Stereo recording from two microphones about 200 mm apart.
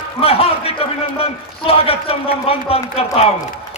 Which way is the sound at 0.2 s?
30° left (ahead or behind).